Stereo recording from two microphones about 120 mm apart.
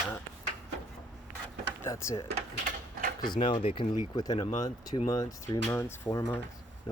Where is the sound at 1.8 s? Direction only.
25° left (ahead or behind).